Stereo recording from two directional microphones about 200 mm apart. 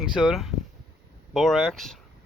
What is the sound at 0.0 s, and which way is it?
Speech, 5° right (ahead or behind).